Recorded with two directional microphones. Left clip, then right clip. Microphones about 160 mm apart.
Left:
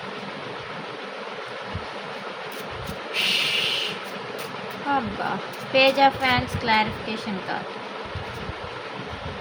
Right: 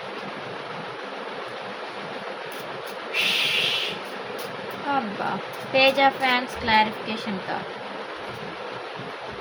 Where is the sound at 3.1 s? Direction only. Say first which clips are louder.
Even; 10° left (ahead or behind).